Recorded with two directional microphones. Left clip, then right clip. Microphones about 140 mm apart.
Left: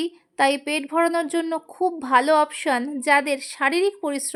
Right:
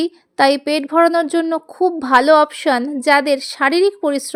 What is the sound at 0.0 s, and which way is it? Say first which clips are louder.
A woman's voice: right 6 dB; 30° right (ahead or behind).